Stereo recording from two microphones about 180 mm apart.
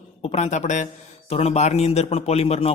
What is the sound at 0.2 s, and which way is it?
A man's voice, 35° left (ahead or behind).